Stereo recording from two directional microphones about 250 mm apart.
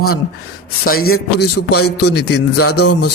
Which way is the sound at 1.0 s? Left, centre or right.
Left.